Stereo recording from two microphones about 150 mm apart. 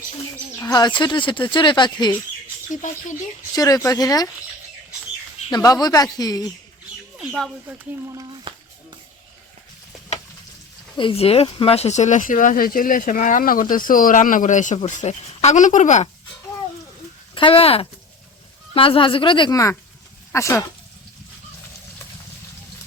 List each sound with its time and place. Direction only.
0.6 s speech: 25° left (ahead or behind)
3.5 s speech: 25° left (ahead or behind)
5.5 s speech: 25° left (ahead or behind)
7.7 s speech: 20° right (ahead or behind)
10.9 s speech: 35° left (ahead or behind); by 16.0 s 55° left (ahead or behind)
17.3 s speech: 40° left (ahead or behind); by 20.7 s 20° left (ahead or behind)